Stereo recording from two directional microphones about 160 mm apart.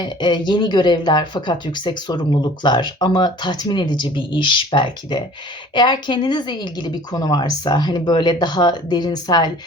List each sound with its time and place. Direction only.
0.0 s speech: 30° left (ahead or behind)